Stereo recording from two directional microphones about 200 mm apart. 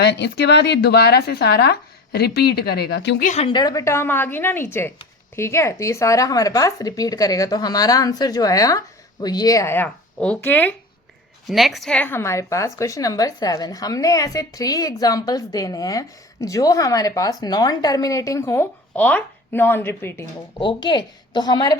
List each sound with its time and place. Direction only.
0.0 s speech: 60° left (ahead or behind)
3.2 s a woman's voice: 30° left (ahead or behind); by 20.2 s 10° left (ahead or behind)
20.6 s a woman's voice: 25° left (ahead or behind)